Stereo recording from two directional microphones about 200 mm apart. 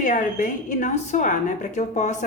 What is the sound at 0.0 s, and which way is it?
A woman's voice, 40° left (ahead or behind).